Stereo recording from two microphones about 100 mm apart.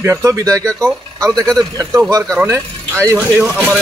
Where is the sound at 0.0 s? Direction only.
30° right (ahead or behind).